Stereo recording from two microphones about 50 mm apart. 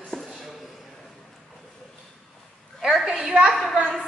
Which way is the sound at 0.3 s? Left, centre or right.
Centre.